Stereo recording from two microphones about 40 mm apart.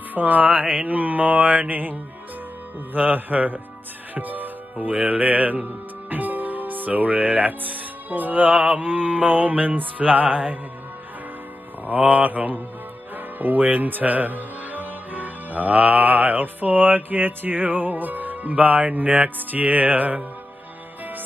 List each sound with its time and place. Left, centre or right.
0.1 s music: right
4.7 s speech: right
8.7 s music: right
11.8 s music: right
13.1 s speech: right